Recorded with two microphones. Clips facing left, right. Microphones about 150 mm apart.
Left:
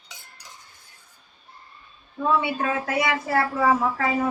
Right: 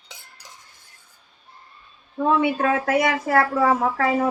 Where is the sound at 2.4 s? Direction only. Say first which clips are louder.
Right 5 dB; 55° right (ahead or behind).